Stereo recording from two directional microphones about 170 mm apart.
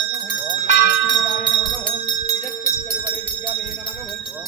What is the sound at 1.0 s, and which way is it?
Music, 30° left (ahead or behind).